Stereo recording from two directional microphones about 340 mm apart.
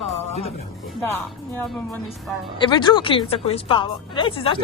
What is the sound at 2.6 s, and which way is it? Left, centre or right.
Speech, centre.